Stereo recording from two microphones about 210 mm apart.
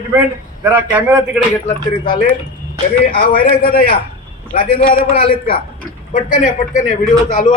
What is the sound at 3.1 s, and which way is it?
Speech, 45° left (ahead or behind).